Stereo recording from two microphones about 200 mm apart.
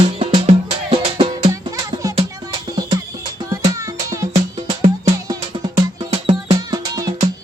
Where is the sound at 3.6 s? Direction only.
15° right (ahead or behind).